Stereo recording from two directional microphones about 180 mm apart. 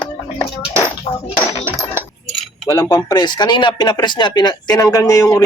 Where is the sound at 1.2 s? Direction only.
30° left (ahead or behind).